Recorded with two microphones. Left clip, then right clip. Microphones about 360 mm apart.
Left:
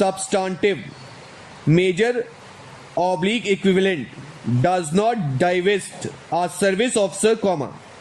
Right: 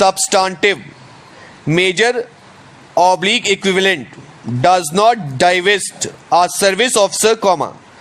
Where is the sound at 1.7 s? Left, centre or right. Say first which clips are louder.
Right 5 dB; centre.